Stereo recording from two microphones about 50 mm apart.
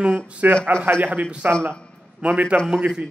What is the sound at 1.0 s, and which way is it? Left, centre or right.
A man's voice, right.